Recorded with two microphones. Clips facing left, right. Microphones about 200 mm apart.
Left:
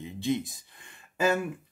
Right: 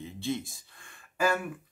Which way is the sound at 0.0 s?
15° left (ahead or behind).